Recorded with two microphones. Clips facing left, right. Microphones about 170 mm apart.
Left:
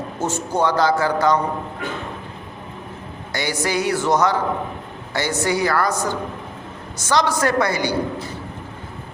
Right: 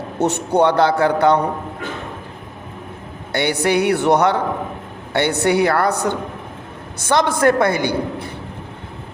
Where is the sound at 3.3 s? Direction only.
60° right (ahead or behind).